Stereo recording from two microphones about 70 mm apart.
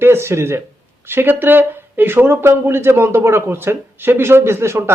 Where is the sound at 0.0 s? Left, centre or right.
Right.